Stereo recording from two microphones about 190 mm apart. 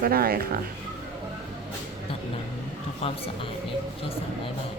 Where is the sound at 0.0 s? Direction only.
50° right (ahead or behind).